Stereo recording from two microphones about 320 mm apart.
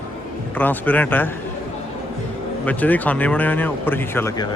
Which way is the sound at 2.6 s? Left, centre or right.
Centre.